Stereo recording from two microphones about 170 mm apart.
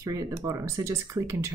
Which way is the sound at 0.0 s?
20° right (ahead or behind).